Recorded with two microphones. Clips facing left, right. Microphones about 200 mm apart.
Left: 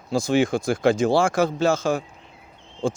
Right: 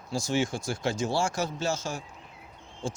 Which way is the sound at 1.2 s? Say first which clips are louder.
Left 9 dB; 55° left (ahead or behind).